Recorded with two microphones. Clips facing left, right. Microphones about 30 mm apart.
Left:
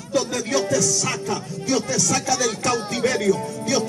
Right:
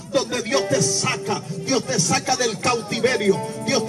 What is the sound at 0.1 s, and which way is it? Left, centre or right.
Music, right.